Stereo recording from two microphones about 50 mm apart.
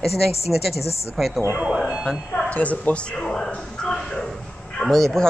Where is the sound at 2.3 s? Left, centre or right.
Left.